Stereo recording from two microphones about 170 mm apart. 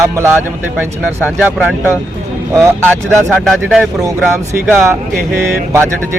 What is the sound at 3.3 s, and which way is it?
Speech, centre (ahead or behind).